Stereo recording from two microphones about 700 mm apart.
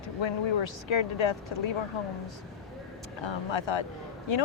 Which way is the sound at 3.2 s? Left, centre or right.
Left.